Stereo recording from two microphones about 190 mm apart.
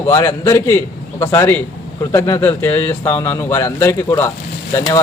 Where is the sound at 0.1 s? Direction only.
15° left (ahead or behind).